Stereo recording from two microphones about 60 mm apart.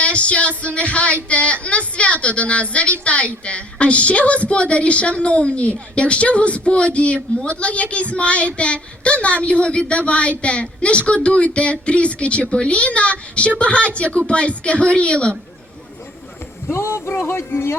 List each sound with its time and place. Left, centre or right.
0.0 s a woman's voice: centre
16.6 s speech: left